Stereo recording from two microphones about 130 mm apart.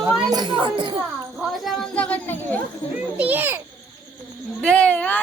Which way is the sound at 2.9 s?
10° right (ahead or behind).